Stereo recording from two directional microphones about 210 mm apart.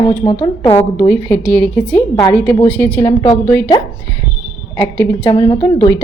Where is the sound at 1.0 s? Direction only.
10° left (ahead or behind).